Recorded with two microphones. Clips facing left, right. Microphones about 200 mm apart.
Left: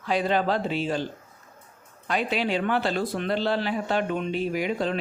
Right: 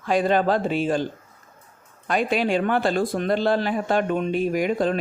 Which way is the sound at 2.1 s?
50° right (ahead or behind).